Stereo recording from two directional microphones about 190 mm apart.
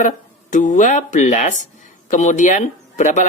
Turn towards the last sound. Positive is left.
turn(degrees=40)  # may be behind; listen again after turning